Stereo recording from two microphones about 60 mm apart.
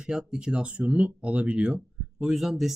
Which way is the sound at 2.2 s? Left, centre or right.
Centre.